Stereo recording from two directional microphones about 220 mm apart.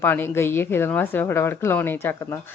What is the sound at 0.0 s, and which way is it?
A woman's voice, 10° left (ahead or behind).